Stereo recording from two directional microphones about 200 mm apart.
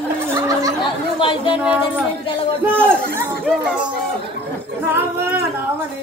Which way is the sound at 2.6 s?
10° right (ahead or behind).